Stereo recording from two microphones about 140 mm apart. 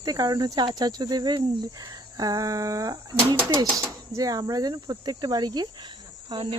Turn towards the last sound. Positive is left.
turn(degrees=-35)  # may be behind; listen again after turning